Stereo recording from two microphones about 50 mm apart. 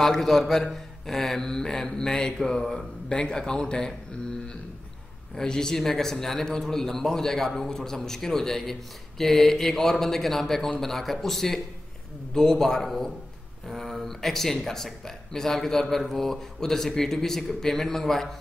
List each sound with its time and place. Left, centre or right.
0.0 s speech: centre